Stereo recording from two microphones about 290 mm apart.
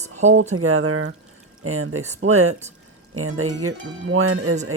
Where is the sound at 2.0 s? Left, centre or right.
Right.